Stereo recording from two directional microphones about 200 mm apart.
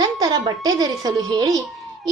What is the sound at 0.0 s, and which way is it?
A woman's voice, 20° right (ahead or behind).